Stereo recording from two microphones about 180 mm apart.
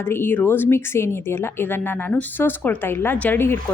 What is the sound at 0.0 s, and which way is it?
A woman's voice, 10° left (ahead or behind).